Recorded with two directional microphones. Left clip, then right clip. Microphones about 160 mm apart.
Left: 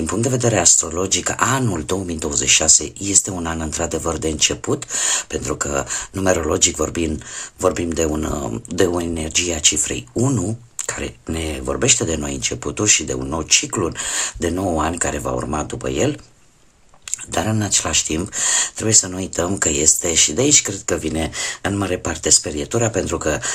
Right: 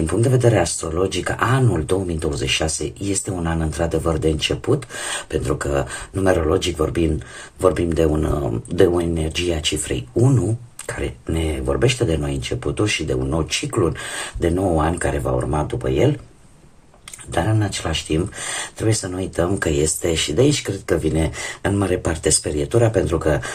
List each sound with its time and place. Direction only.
0.0 s speech: 30° left (ahead or behind)
7.6 s speech: 25° left (ahead or behind)
17.3 s speech: 40° left (ahead or behind)